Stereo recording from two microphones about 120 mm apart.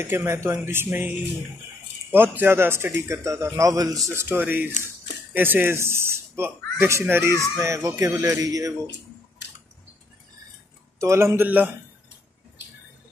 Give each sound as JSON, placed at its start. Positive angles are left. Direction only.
{"t": 0.0, "sound": "speech", "side_deg": -20}
{"t": 4.1, "sound": "speech", "side_deg": -20}
{"t": 11.0, "sound": "speech", "side_deg": -25}